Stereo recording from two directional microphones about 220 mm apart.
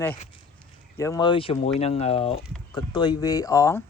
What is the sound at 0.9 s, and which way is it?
A woman's voice, 15° left (ahead or behind).